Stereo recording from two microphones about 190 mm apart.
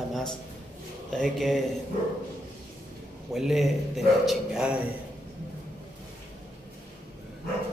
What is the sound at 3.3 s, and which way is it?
A man's voice, centre (ahead or behind).